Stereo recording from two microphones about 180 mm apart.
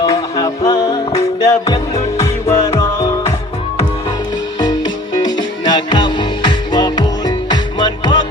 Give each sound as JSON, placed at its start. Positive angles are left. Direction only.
{"t": 0.1, "sound": "music", "side_deg": 20}
{"t": 4.6, "sound": "music", "side_deg": 25}